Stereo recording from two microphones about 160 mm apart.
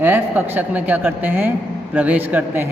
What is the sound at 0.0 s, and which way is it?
A man's voice, 10° right (ahead or behind).